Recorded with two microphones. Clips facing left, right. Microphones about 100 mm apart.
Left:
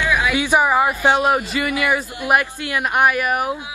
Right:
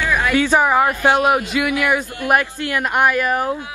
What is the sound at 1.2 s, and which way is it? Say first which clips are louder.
A man's voice: right 2 dB; centre (ahead or behind).